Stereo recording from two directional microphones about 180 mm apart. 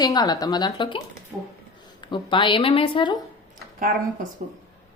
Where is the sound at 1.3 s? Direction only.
10° right (ahead or behind).